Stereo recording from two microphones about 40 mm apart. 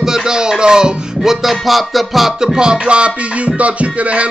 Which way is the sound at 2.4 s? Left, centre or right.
Centre.